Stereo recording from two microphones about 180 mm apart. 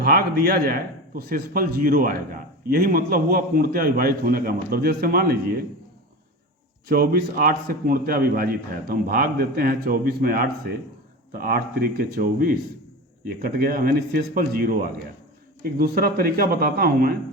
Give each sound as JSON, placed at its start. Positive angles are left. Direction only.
{"t": 0.0, "sound": "a man's voice", "side_deg": -55}
{"t": 6.8, "sound": "a man's voice", "side_deg": -55}